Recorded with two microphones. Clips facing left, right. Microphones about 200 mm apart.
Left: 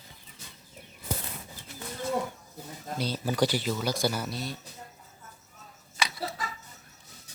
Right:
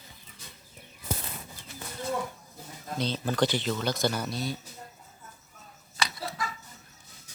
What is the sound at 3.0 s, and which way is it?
Speech, 10° left (ahead or behind).